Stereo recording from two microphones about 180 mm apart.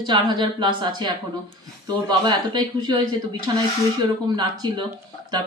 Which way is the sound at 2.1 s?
25° right (ahead or behind).